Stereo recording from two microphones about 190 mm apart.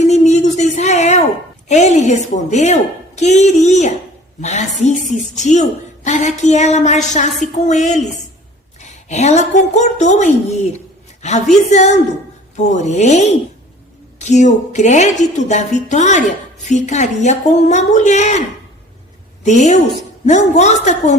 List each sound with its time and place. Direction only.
0.0 s a sound: 35° left (ahead or behind)
1.6 s a woman's voice: 35° left (ahead or behind)
19.5 s a woman's voice: 40° left (ahead or behind)